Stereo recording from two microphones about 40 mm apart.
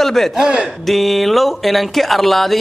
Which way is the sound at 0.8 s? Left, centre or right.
Centre.